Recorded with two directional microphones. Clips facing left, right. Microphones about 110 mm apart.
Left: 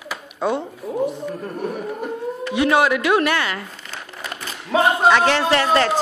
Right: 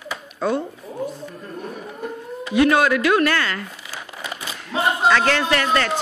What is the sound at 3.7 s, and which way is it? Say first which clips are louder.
Crumpling: even; 10° right (ahead or behind).